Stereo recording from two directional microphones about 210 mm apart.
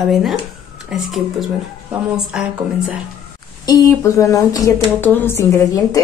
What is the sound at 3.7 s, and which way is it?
A woman's voice, 15° left (ahead or behind).